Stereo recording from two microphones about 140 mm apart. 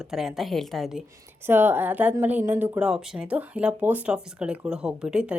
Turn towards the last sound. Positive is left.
turn(degrees=-5)  # may be behind; listen again after turning